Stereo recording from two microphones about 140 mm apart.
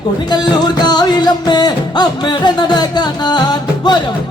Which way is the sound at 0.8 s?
30° left (ahead or behind).